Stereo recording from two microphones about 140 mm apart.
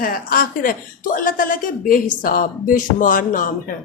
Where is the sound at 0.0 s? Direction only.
90° left.